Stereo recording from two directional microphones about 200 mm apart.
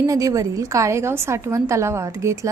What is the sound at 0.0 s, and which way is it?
A woman's voice, 15° right (ahead or behind).